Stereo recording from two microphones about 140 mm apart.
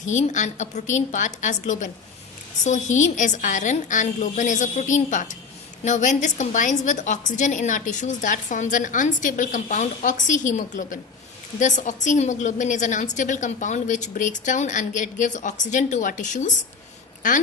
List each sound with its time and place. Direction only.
0.0 s a woman's voice: 60° left (ahead or behind)
11.6 s a woman's voice: 60° left (ahead or behind)